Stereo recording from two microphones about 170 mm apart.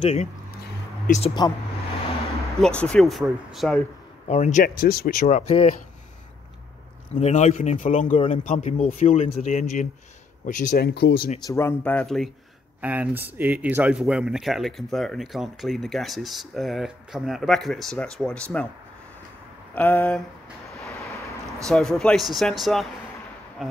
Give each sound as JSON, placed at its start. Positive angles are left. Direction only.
{"t": 0.0, "sound": "speech", "side_deg": 40}
{"t": 2.5, "sound": "speech", "side_deg": 5}
{"t": 4.3, "sound": "speech", "side_deg": 45}
{"t": 4.6, "sound": "speech", "side_deg": 65}
{"t": 5.5, "sound": "speech", "side_deg": 35}
{"t": 7.2, "sound": "speech", "side_deg": 40}
{"t": 11.0, "sound": "speech", "side_deg": 75}
{"t": 11.4, "sound": "speech", "side_deg": 15}
{"t": 12.8, "sound": "speech", "side_deg": -10}
{"t": 19.7, "sound": "speech", "side_deg": 10}
{"t": 21.6, "sound": "speech", "side_deg": 5}